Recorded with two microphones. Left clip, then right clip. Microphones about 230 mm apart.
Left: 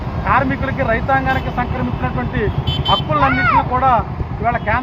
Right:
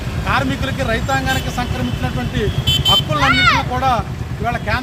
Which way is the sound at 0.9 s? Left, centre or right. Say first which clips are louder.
Left 3 dB; right.